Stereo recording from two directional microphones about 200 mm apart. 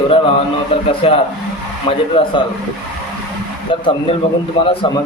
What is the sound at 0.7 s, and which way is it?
A man's voice, 30° left (ahead or behind).